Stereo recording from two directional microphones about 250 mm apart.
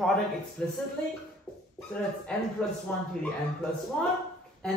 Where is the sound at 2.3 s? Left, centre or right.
Centre.